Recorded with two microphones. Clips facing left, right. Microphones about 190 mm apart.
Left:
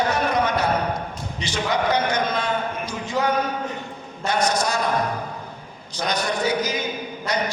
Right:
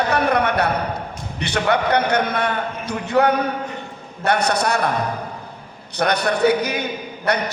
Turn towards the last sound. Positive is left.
turn(degrees=-60)  # may be behind; listen again after turning